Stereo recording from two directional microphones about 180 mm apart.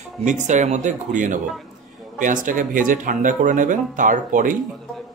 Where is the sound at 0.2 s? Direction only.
45° right (ahead or behind).